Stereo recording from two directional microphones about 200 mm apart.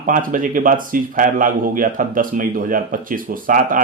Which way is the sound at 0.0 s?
40° right (ahead or behind).